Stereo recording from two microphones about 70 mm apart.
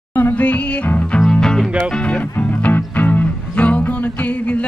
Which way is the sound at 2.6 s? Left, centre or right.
Left.